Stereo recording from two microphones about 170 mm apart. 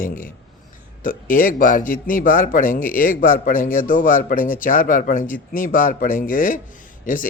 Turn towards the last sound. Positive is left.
turn(degrees=50)  # may be behind; listen again after turning